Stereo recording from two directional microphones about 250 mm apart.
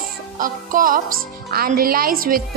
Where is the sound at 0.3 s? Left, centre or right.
Right.